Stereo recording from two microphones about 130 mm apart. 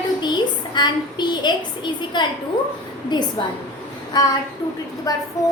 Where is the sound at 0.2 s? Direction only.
35° left (ahead or behind).